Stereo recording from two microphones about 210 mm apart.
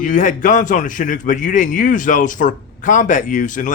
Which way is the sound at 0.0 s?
35° left (ahead or behind).